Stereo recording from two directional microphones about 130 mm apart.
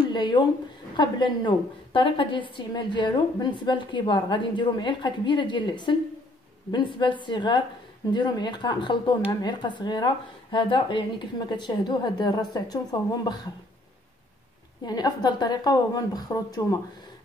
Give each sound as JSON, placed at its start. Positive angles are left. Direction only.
{"t": 0.1, "sound": "speech", "side_deg": 35}
{"t": 14.9, "sound": "speech", "side_deg": 30}